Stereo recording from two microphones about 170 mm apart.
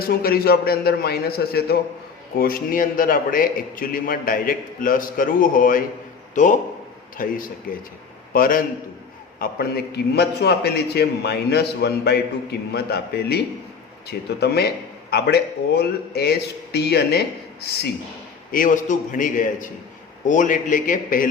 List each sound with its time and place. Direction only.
0.0 s a man's voice: 60° left (ahead or behind)
9.4 s a man's voice: 65° left (ahead or behind)
18.5 s a man's voice: 50° left (ahead or behind)